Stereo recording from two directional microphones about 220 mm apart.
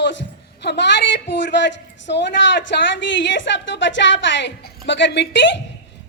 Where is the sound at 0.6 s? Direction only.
50° left (ahead or behind).